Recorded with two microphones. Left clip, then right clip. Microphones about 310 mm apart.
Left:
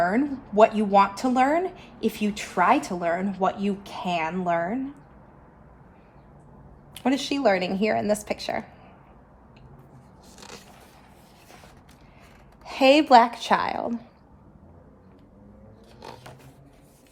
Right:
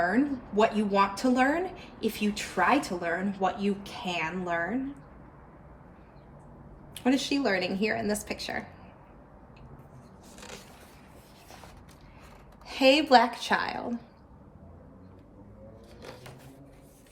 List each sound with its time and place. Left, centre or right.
0.1 s speech: left
6.9 s speech: left
12.6 s speech: left